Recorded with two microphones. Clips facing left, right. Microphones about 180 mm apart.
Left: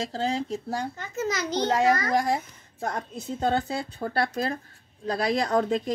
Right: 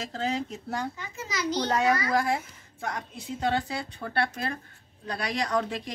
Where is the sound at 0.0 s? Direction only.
35° left (ahead or behind).